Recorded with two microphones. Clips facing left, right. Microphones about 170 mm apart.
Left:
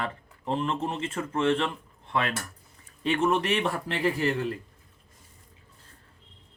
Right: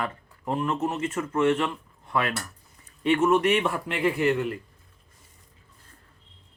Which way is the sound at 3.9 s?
35° left (ahead or behind).